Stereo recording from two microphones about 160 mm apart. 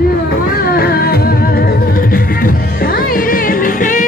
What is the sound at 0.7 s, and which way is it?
Music, 75° left (ahead or behind).